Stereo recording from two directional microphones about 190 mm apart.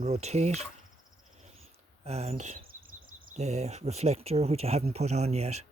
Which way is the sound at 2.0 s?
35° right (ahead or behind).